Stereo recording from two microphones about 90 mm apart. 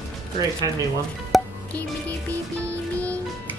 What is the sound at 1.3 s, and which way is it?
Music, centre (ahead or behind).